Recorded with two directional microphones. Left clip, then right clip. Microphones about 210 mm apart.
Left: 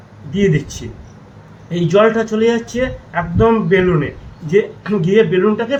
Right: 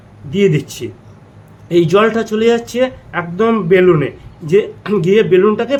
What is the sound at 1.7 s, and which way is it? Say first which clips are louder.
Speech: right 1 dB; 45° right (ahead or behind).